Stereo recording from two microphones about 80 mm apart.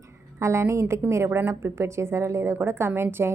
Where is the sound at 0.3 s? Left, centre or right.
Right.